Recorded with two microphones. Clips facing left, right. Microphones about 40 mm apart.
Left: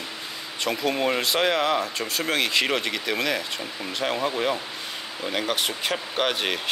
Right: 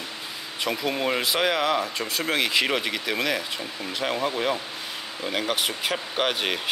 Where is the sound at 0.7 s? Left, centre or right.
Centre.